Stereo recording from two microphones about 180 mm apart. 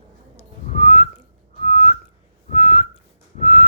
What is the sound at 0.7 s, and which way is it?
Whistling, 35° left (ahead or behind).